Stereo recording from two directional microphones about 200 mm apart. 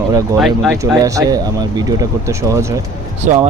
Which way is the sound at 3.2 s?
35° right (ahead or behind).